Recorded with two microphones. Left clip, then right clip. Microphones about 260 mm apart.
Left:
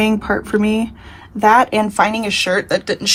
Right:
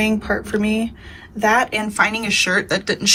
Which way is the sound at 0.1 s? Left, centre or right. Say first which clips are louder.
Left 3 dB; left.